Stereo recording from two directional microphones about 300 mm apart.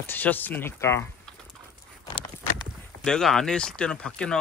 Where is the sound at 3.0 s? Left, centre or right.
Centre.